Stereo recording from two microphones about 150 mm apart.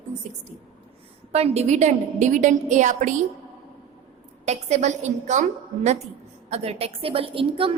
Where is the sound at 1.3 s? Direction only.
45° right (ahead or behind).